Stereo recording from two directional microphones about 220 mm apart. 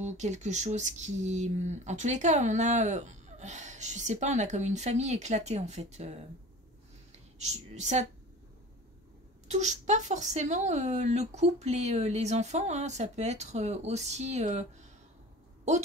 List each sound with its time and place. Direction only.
0.0 s speech: 30° right (ahead or behind)
7.3 s speech: 30° right (ahead or behind)
9.5 s speech: 30° right (ahead or behind)